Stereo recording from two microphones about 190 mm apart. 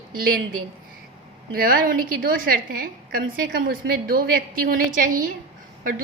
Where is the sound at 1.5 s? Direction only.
50° right (ahead or behind).